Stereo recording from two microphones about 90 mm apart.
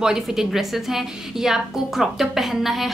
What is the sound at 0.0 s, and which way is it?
A woman's voice, 5° right (ahead or behind).